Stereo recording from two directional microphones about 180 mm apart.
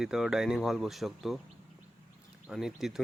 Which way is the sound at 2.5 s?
Centre (ahead or behind).